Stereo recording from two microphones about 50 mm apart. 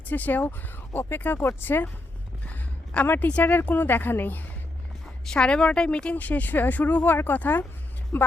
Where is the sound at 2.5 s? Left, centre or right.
Left.